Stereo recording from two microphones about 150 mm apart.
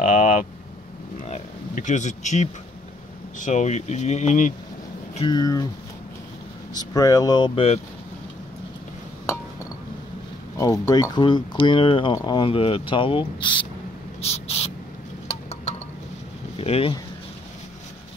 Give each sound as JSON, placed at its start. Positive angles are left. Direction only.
{"t": 0.0, "sound": "vehicle", "side_deg": 60}
{"t": 1.2, "sound": "a sound", "side_deg": 50}
{"t": 3.3, "sound": "speech", "side_deg": 55}
{"t": 5.3, "sound": "speech", "side_deg": 25}
{"t": 6.7, "sound": "speech", "side_deg": 25}
{"t": 10.6, "sound": "speech", "side_deg": 25}
{"t": 14.2, "sound": "a sound", "side_deg": 45}
{"t": 16.5, "sound": "speech", "side_deg": 40}